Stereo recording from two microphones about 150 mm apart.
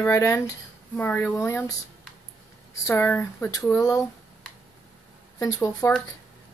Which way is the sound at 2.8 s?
15° left (ahead or behind).